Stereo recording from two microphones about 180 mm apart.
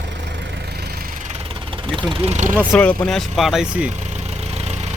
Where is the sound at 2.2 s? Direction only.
40° right (ahead or behind).